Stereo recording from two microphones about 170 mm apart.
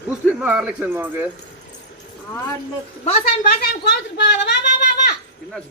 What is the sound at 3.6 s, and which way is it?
Speech, 75° left (ahead or behind).